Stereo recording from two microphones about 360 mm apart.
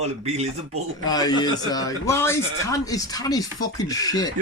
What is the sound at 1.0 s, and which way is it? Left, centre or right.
A man's voice, centre.